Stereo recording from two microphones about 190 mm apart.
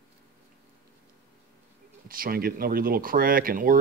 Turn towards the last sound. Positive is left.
turn(degrees=-50)  # may be behind; listen again after turning